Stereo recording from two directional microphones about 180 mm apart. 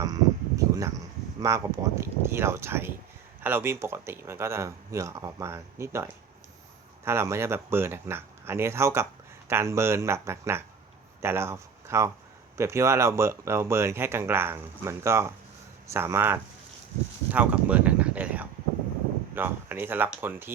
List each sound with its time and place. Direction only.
0.0 s speech: 20° right (ahead or behind)
17.3 s a sound: 10° right (ahead or behind)
19.3 s speech: 10° right (ahead or behind)